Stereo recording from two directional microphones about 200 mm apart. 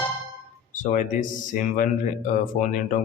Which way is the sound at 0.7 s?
40° left (ahead or behind).